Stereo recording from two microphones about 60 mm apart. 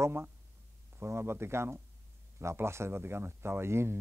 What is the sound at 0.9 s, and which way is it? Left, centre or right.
Speech, right.